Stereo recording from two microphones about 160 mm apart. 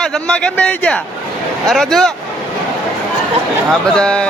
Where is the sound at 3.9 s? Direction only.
5° left (ahead or behind).